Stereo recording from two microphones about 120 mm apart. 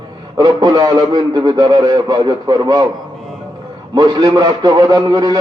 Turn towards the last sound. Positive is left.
turn(degrees=-35)  # may be behind; listen again after turning